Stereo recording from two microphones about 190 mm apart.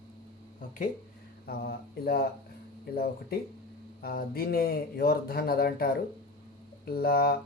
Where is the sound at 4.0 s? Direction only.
50° left (ahead or behind).